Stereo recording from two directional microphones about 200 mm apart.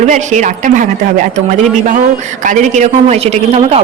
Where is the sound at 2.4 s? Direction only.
35° right (ahead or behind).